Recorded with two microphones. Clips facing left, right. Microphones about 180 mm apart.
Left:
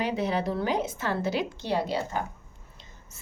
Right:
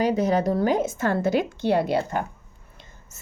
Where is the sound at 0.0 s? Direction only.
40° right (ahead or behind); by 2.2 s 55° right (ahead or behind).